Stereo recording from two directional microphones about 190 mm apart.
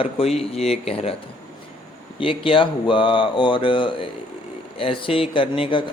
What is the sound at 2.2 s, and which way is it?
Speech, 30° left (ahead or behind).